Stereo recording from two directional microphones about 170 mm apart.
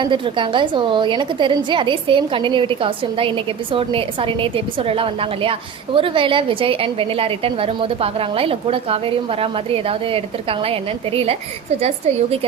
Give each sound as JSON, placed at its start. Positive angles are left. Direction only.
{"t": 0.0, "sound": "a woman's voice", "side_deg": -30}